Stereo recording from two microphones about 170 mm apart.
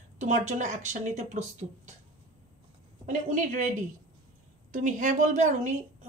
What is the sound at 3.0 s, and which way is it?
Speech, 50° right (ahead or behind).